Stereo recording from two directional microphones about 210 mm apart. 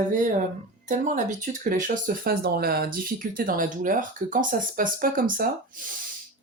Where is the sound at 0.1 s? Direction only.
35° right (ahead or behind).